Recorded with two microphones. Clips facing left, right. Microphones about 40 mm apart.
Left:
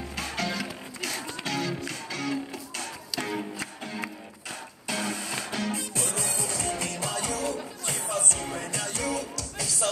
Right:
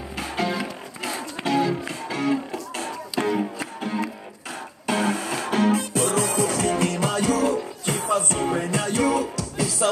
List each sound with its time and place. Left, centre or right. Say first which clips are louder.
0.1 s music: right 6 dB; centre
4.8 s music: right 8 dB; right
8.3 s music: right 9 dB; right